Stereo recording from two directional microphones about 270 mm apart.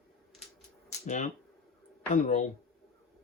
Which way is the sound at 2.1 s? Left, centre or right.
Left.